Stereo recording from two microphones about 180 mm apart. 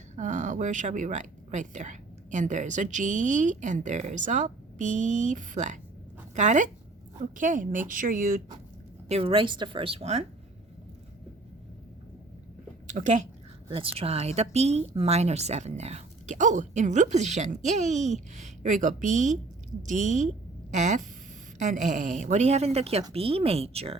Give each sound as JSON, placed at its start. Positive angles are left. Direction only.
{"t": 0.2, "sound": "a woman's voice", "side_deg": -45}
{"t": 9.0, "sound": "a woman's voice", "side_deg": -35}
{"t": 12.9, "sound": "speech", "side_deg": -45}
{"t": 13.7, "sound": "a woman's voice", "side_deg": -30}